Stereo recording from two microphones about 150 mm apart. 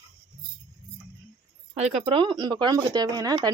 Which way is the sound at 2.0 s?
35° right (ahead or behind).